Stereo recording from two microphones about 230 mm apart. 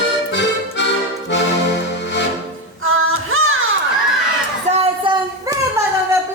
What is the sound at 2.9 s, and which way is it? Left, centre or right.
Music, right.